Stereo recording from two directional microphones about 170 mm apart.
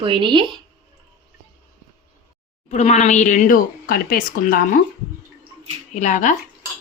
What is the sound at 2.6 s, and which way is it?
Speech, 40° left (ahead or behind).